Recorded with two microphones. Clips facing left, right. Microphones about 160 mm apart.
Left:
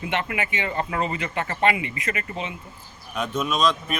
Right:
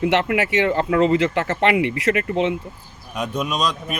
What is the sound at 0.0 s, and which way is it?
Speech, 75° right (ahead or behind).